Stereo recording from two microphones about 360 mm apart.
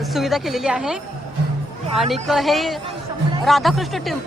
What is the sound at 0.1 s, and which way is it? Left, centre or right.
Speech, centre.